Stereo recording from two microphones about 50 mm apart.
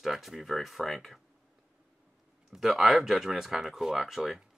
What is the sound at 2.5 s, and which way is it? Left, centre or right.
Speech, centre.